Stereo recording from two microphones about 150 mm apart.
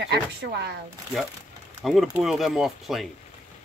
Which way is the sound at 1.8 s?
Centre (ahead or behind).